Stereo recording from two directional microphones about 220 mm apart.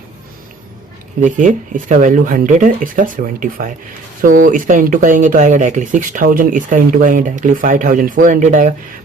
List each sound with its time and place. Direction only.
1.2 s speech: 35° right (ahead or behind)